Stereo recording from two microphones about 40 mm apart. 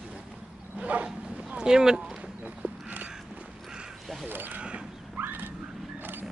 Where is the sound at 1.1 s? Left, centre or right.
Centre.